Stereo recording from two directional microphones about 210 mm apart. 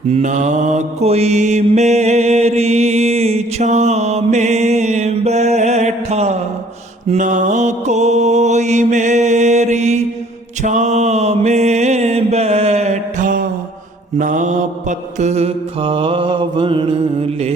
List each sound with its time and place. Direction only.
0.1 s mantra: 35° right (ahead or behind)